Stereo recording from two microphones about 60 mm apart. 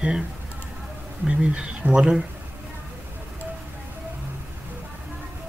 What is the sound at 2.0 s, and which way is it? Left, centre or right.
Speech, centre.